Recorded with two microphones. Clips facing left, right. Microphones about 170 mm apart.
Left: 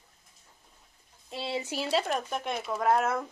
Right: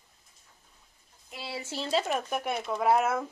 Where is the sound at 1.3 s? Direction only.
25° left (ahead or behind).